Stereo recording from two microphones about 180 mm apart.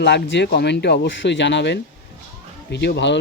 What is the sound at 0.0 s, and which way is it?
Speech, 75° left (ahead or behind).